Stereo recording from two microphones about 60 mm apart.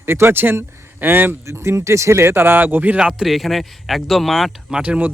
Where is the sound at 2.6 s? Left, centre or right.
Right.